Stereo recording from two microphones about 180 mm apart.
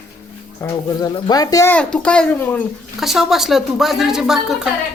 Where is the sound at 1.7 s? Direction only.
5° left (ahead or behind).